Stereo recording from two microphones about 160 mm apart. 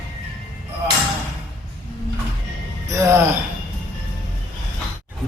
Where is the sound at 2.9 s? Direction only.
20° right (ahead or behind).